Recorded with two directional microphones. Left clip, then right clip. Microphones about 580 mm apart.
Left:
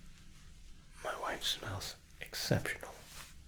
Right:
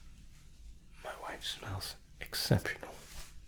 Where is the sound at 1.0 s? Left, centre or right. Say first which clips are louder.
Left 4 dB; centre.